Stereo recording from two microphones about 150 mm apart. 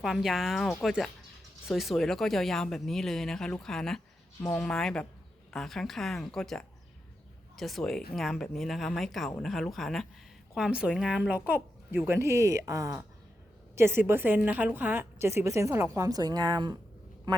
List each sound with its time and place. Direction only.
0.0 s a woman's voice: centre (ahead or behind); by 17.4 s 30° right (ahead or behind)